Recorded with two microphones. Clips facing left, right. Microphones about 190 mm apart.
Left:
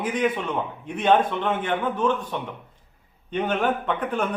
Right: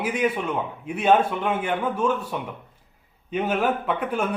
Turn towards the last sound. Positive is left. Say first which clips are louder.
# even
turn(degrees=-10)  # may be behind; listen again after turning